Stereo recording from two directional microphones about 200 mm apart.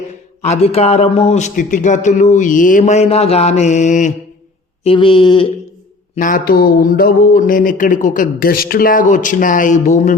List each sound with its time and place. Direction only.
0.4 s a man's voice: 30° left (ahead or behind)
4.8 s speech: 25° left (ahead or behind)
6.1 s speech: 45° left (ahead or behind)